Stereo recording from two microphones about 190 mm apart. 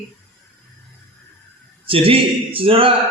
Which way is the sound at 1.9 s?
30° right (ahead or behind).